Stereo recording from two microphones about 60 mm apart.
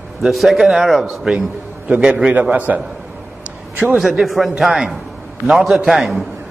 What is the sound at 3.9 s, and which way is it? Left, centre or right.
A man's voice, centre.